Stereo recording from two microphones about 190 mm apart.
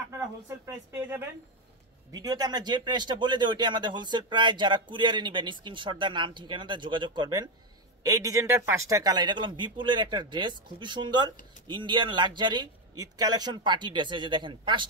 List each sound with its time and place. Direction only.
0.5 s a woman's voice: 10° right (ahead or behind)